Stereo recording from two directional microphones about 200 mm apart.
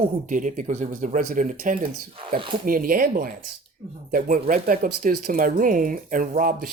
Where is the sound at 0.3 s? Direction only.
40° right (ahead or behind).